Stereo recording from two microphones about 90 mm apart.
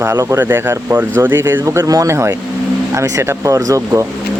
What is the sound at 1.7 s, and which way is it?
Speech, 40° right (ahead or behind).